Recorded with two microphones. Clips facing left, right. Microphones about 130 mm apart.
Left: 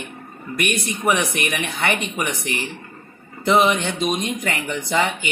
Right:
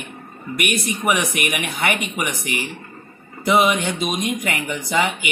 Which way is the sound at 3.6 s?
30° left (ahead or behind).